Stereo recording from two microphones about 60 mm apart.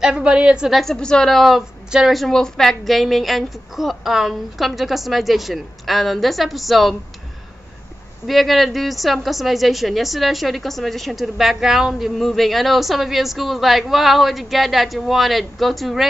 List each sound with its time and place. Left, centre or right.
0.0 s a woman's voice: centre
0.7 s a woman's voice: centre
0.9 s a woman's voice: centre
1.4 s speech: centre
2.1 s a woman's voice: centre
8.3 s a woman's voice: centre